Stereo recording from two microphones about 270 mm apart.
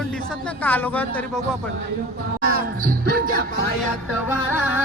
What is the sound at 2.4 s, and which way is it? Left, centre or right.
Speech, right.